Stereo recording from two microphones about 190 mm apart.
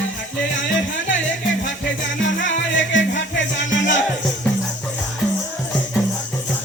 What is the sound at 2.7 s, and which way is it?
Music, 75° left (ahead or behind).